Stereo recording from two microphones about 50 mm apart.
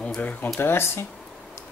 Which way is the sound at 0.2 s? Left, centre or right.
Left.